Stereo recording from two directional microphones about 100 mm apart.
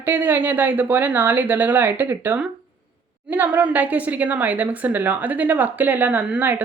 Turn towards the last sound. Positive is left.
turn(degrees=-15)  # may be behind; listen again after turning